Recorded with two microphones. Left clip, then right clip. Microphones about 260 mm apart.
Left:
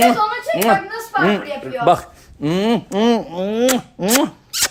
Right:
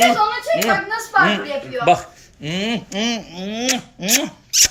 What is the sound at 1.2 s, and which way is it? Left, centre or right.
Speech, centre.